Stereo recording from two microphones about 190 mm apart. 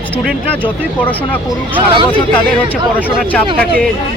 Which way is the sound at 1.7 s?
25° right (ahead or behind).